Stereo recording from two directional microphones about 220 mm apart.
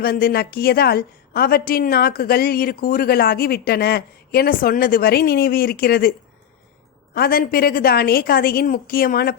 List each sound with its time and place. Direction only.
0.0 s a woman's voice: 45° left (ahead or behind)